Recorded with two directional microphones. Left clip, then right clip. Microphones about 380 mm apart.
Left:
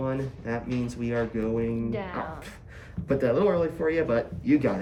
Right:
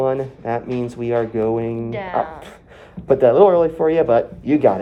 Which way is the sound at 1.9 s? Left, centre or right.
Right.